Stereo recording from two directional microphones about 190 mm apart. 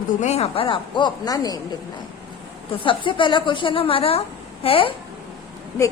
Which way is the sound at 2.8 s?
25° left (ahead or behind).